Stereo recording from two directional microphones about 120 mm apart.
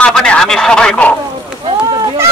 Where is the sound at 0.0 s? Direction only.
5° left (ahead or behind).